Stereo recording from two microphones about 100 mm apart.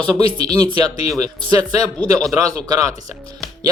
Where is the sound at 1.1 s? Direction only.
35° right (ahead or behind).